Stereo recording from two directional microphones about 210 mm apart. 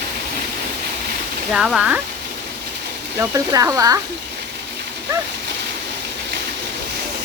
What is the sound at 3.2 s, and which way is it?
Speech, 15° right (ahead or behind).